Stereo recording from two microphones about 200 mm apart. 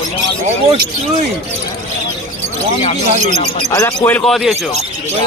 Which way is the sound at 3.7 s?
15° left (ahead or behind).